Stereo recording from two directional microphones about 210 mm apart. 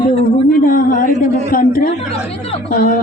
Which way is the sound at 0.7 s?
40° left (ahead or behind).